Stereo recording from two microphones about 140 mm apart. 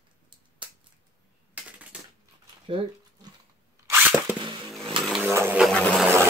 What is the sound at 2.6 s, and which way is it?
Dog, 40° right (ahead or behind).